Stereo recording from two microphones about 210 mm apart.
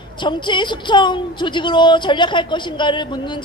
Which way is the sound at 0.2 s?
20° left (ahead or behind).